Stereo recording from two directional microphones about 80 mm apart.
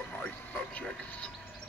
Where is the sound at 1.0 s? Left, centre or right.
Centre.